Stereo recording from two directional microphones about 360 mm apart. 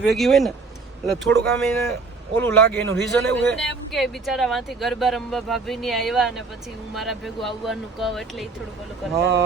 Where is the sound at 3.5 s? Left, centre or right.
Centre.